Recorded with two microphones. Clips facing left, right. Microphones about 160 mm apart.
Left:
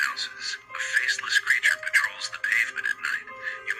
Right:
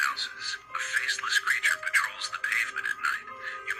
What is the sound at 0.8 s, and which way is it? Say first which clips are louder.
Speech: left 4 dB; 80° left.